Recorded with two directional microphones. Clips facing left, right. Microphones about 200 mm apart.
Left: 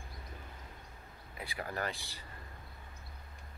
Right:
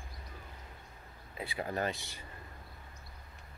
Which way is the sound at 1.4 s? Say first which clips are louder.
Right 4 dB; 20° right (ahead or behind).